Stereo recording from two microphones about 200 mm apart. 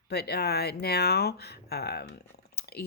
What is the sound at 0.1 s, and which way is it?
Speech, 55° left (ahead or behind).